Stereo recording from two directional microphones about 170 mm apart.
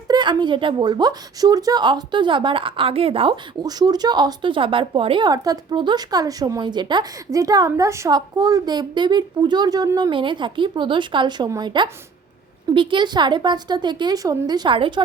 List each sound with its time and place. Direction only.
0.1 s a woman's voice: 25° right (ahead or behind)